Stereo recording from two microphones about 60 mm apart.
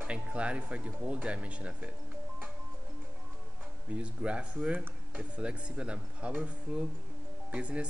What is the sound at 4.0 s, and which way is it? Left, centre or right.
Speech, right.